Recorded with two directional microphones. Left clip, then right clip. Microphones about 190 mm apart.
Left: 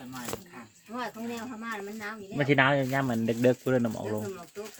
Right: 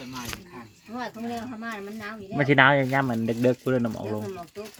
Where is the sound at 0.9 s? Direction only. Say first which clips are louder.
Right 3 dB; 10° right (ahead or behind).